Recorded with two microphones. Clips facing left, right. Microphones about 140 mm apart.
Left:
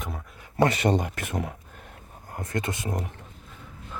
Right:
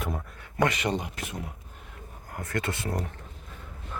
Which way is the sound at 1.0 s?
55° left (ahead or behind).